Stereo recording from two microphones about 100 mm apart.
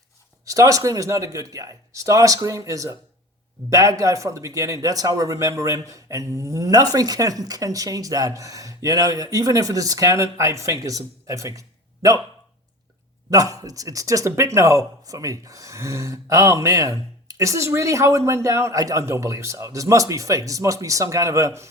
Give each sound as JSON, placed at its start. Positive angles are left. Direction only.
{"t": 0.4, "sound": "speech", "side_deg": -35}
{"t": 13.3, "sound": "speech", "side_deg": -35}